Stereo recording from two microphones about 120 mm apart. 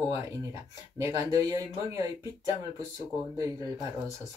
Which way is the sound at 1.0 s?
25° right (ahead or behind).